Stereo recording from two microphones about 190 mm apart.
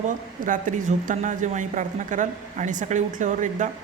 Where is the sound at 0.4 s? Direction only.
45° right (ahead or behind).